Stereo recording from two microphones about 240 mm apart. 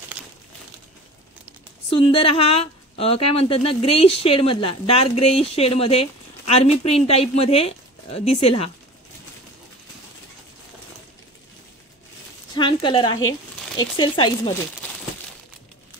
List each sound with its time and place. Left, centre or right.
1.9 s speech: left
12.5 s speech: centre